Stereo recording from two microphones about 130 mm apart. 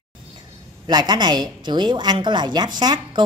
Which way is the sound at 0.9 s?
35° right (ahead or behind).